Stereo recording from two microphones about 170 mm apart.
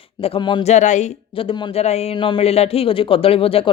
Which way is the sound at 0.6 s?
45° left (ahead or behind).